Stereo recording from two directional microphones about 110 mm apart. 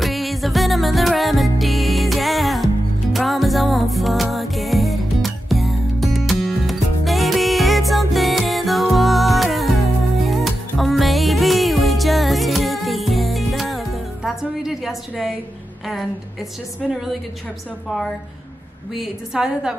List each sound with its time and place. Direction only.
0.0 s music: centre (ahead or behind)
15.9 s a woman's voice: centre (ahead or behind)
18.9 s a woman's voice: 5° right (ahead or behind)